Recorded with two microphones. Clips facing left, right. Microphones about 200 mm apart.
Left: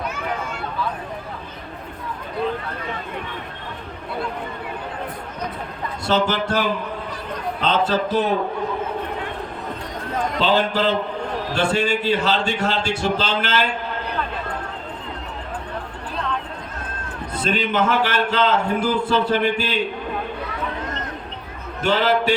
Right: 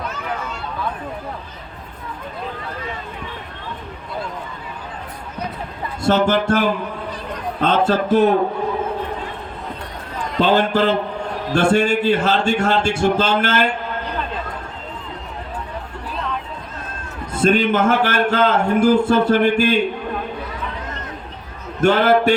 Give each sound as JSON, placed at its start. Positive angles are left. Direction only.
{"t": 6.0, "sound": "a man's voice", "side_deg": -50}
{"t": 7.6, "sound": "a man's voice", "side_deg": -50}
{"t": 10.3, "sound": "a man's voice", "side_deg": -50}
{"t": 17.4, "sound": "a man's voice", "side_deg": -50}
{"t": 21.8, "sound": "a man's voice", "side_deg": -50}